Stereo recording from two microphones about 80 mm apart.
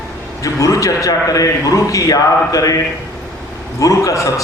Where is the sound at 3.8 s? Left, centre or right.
Left.